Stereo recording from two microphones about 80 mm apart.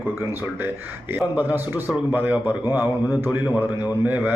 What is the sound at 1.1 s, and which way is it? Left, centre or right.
Speech, right.